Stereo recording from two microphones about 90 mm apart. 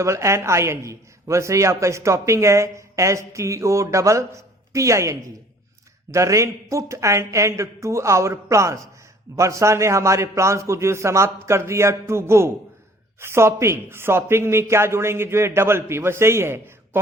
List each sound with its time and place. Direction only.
0.0 s a man's voice: 30° right (ahead or behind)